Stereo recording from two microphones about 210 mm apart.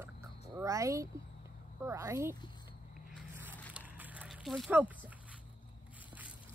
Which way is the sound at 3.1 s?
10° right (ahead or behind).